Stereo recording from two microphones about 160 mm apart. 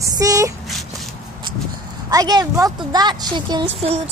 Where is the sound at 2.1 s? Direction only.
25° right (ahead or behind).